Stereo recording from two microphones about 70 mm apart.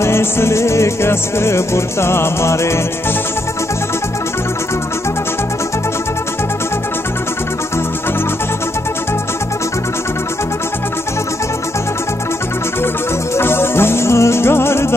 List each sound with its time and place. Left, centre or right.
0.0 s music: left
13.4 s music: left